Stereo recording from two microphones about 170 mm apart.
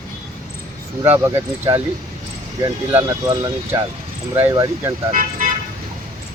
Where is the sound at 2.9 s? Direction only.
15° right (ahead or behind).